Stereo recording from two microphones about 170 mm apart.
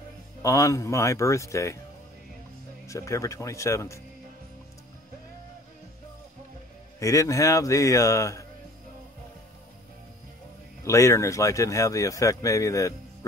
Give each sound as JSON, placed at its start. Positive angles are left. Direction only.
{"t": 0.4, "sound": "a man's voice", "side_deg": 20}
{"t": 2.9, "sound": "a man's voice", "side_deg": 20}
{"t": 7.0, "sound": "a man's voice", "side_deg": 20}
{"t": 10.8, "sound": "speech", "side_deg": 15}